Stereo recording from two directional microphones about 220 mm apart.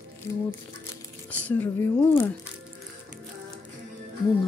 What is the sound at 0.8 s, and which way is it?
Speech, 5° left (ahead or behind).